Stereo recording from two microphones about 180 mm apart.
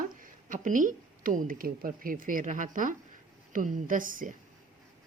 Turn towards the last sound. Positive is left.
turn(degrees=-50)  # may be behind; listen again after turning